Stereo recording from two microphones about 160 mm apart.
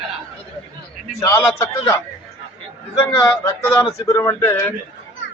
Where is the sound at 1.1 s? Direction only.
15° left (ahead or behind).